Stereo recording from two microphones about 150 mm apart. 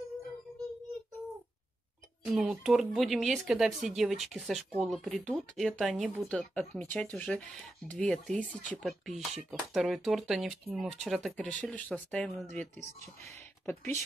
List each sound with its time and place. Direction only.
2.2 s speech: 5° right (ahead or behind); by 14.0 s 15° left (ahead or behind)